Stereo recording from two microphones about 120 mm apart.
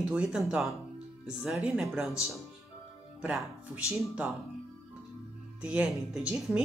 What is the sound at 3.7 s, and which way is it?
Speech, 5° right (ahead or behind).